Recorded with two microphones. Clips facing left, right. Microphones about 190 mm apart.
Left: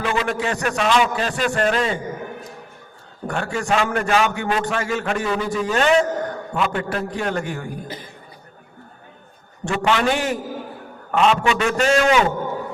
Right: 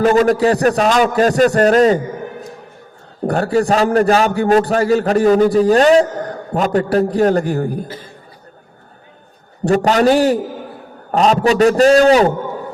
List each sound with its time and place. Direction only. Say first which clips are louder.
0.0 s a man's voice: right 11 dB; 40° right (ahead or behind)
3.2 s a man's voice: right 8 dB; 35° right (ahead or behind)
9.6 s a man's voice: right 8 dB; 40° right (ahead or behind)